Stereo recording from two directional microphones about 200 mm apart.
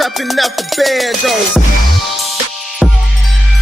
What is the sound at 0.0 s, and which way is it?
Music, centre (ahead or behind).